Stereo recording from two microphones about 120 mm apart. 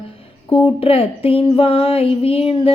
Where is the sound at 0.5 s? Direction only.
50° left (ahead or behind).